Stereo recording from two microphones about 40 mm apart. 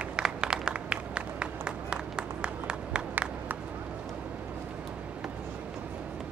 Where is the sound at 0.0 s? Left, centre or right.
Right.